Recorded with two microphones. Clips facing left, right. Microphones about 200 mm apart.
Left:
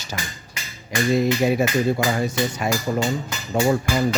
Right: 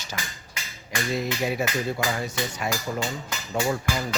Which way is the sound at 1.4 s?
40° left (ahead or behind).